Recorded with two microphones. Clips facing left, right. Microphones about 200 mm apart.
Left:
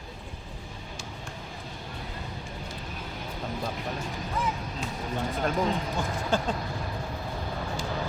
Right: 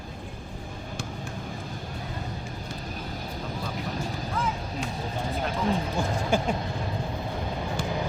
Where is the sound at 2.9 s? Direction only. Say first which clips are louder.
Right 3 dB; 40° right (ahead or behind).